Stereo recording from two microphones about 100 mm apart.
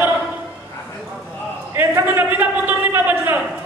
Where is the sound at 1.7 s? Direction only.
20° right (ahead or behind).